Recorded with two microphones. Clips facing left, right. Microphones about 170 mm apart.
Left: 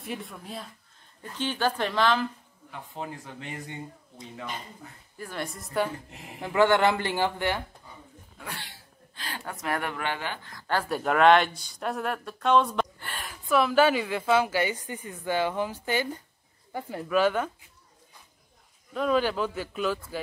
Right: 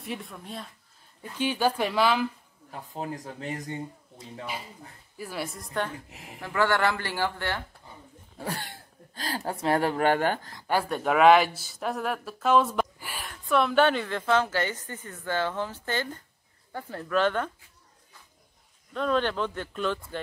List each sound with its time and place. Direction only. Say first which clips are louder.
0.0 s speech: even; centre (ahead or behind)
1.2 s speech: right 2 dB; 10° right (ahead or behind)
2.7 s speech: right 2 dB; 40° right (ahead or behind)
4.5 s speech: right 1 dB; 5° right (ahead or behind)
5.7 s a woman's voice: left 6 dB; 10° left (ahead or behind)
6.4 s speech: left 4 dB; 20° left (ahead or behind)
8.4 s speech: right 6 dB; 40° right (ahead or behind)
10.9 s a woman's voice: right 1 dB; centre (ahead or behind)
18.9 s a woman's voice: left 1 dB; 5° left (ahead or behind)